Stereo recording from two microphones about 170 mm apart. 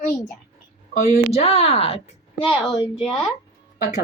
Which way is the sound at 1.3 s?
35° left (ahead or behind).